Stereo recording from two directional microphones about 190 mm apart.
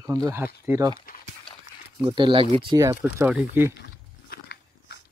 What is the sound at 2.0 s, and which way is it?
Speech, 25° right (ahead or behind).